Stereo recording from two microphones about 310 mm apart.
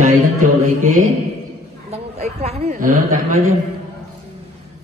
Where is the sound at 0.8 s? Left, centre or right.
Right.